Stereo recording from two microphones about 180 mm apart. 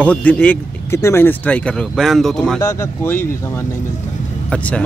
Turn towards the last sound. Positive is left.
turn(degrees=5)  # may be behind; listen again after turning